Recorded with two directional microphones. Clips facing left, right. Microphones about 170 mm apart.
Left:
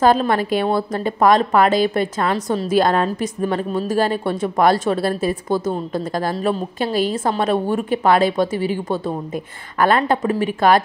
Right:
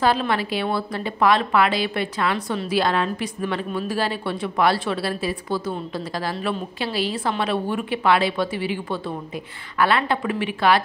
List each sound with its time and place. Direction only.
0.0 s speech: 45° left (ahead or behind)